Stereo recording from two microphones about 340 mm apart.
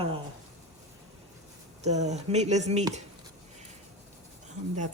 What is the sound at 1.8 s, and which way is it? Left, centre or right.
Speech, centre.